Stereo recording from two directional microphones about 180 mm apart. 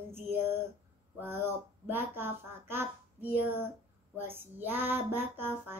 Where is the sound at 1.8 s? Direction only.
10° right (ahead or behind).